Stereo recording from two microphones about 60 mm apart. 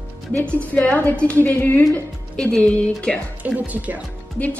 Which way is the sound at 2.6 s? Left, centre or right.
Centre.